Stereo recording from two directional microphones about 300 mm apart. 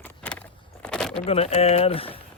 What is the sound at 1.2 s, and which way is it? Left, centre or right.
Speech, centre.